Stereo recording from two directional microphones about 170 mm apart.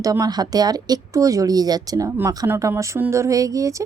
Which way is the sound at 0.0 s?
20° right (ahead or behind).